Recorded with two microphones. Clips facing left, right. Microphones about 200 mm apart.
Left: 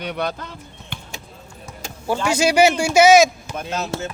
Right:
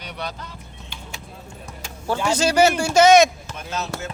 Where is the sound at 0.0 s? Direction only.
55° left (ahead or behind).